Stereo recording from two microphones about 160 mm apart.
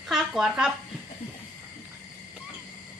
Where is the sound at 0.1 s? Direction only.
Centre (ahead or behind).